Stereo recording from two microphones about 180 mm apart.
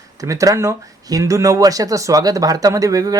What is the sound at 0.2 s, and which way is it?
Speech, 20° right (ahead or behind).